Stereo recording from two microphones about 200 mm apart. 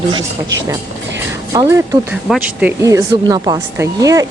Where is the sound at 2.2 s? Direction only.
5° right (ahead or behind).